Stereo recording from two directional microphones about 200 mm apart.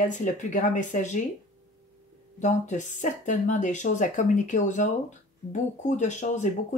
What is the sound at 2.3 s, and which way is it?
Speech, 35° left (ahead or behind).